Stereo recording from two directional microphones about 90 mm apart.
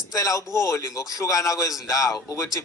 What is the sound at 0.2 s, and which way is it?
A man's voice, 40° left (ahead or behind).